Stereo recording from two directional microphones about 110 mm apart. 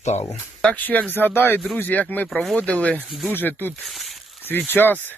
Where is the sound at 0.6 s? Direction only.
15° left (ahead or behind).